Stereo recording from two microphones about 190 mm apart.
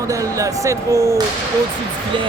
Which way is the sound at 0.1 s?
15° right (ahead or behind).